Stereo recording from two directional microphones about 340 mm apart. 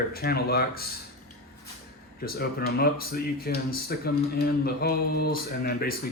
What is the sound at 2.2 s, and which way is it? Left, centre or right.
Speech, left.